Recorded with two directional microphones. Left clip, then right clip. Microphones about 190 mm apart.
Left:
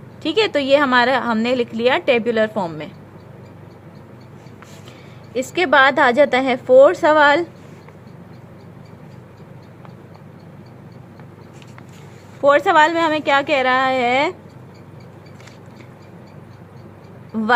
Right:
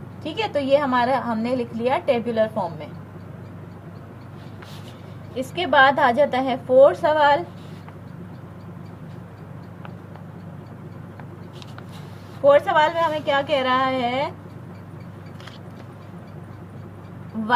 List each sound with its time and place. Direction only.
0.2 s a woman's voice: 60° left (ahead or behind)
5.4 s a woman's voice: 55° left (ahead or behind)
12.5 s a woman's voice: 60° left (ahead or behind)